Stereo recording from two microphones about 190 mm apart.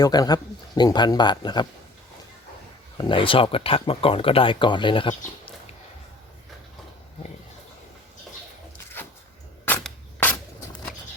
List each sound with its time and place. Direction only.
0.0 s speech: 20° left (ahead or behind)
3.0 s speech: 25° left (ahead or behind)
9.6 s a sound: 10° left (ahead or behind)